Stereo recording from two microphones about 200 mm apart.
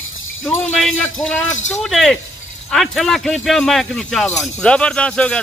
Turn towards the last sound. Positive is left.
turn(degrees=5)  # may be behind; listen again after turning